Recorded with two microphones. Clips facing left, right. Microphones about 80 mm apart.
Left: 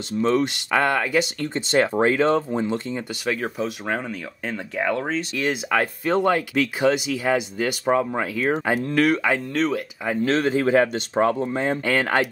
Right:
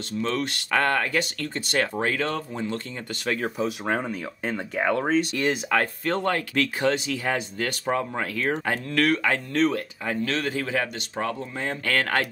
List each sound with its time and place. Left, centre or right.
0.2 s speech: centre
3.3 s speech: centre
10.2 s speech: left